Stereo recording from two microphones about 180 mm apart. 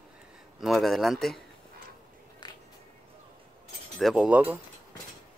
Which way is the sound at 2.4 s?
25° left (ahead or behind).